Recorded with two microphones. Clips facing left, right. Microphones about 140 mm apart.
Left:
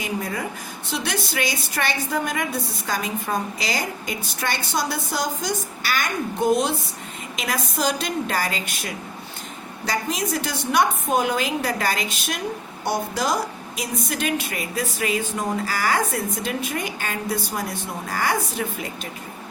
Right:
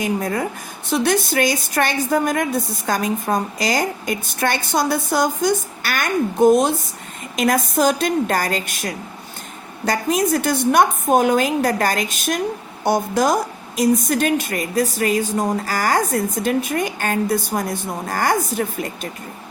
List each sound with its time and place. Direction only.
0.0 s a woman's voice: 50° right (ahead or behind)